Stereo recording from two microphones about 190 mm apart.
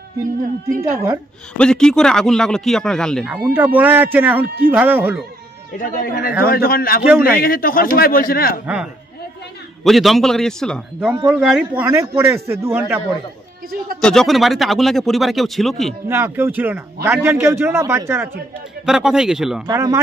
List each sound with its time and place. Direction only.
0.2 s a woman's voice: 45° right (ahead or behind)
1.6 s speech: 5° left (ahead or behind)
3.3 s a man's voice: 10° right (ahead or behind)
5.9 s a man's voice: 45° left (ahead or behind)
7.1 s a man's voice: 10° right (ahead or behind)
7.3 s a man's voice: 50° left (ahead or behind)
9.8 s speech: centre (ahead or behind)
11.8 s a man's voice: 15° right (ahead or behind)
14.0 s speech: centre (ahead or behind)
16.1 s a man's voice: 10° right (ahead or behind)
18.9 s speech: 5° right (ahead or behind)
19.6 s a man's voice: 15° right (ahead or behind)